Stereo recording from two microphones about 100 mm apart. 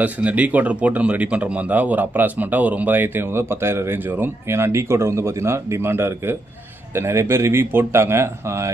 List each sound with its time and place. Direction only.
0.0 s speech: 15° right (ahead or behind)